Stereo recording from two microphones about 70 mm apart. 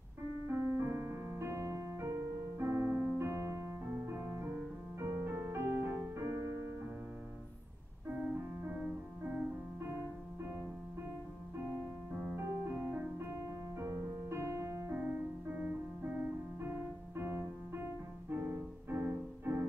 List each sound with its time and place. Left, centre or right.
0.5 s piano: right
2.6 s piano: right
4.0 s music: right
8.1 s music: centre
9.8 s music: right
12.4 s music: right
15.0 s music: centre
16.6 s music: right